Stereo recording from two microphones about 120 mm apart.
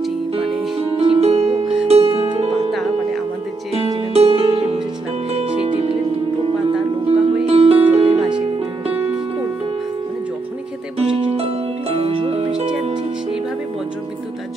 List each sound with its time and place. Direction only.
0.7 s music: 55° right (ahead or behind)
2.7 s music: centre (ahead or behind)
3.7 s music: 55° right (ahead or behind)
7.1 s music: 55° right (ahead or behind)
8.3 s music: 45° right (ahead or behind)
11.3 s harp: 55° right (ahead or behind)